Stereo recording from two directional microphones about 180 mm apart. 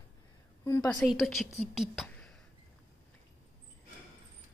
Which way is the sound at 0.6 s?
15° left (ahead or behind).